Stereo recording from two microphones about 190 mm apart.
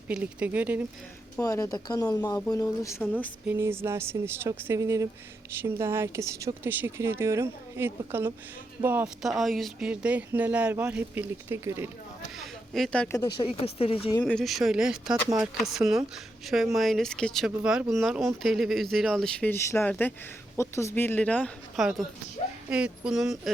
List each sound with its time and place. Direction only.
0.1 s speech: 5° right (ahead or behind)
1.4 s speech: 20° left (ahead or behind)
3.4 s speech: 10° right (ahead or behind)
9.4 s speech: centre (ahead or behind)
12.4 s speech: centre (ahead or behind)
13.4 s speech: 30° left (ahead or behind)
14.3 s speech: centre (ahead or behind)